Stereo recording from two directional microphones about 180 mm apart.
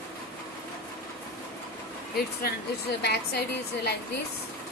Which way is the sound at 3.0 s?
65° left (ahead or behind).